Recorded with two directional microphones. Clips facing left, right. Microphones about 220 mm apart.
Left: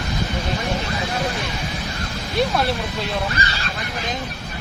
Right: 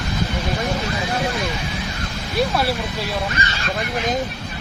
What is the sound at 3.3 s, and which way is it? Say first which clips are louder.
Speech: even; 35° left (ahead or behind).